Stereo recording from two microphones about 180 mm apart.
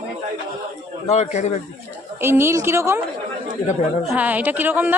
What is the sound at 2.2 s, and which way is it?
Speech, 15° right (ahead or behind).